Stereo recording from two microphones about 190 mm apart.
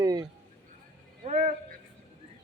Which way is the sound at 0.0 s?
20° right (ahead or behind).